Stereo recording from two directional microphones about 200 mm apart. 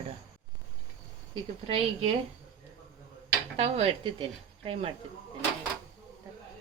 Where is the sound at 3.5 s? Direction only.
30° right (ahead or behind).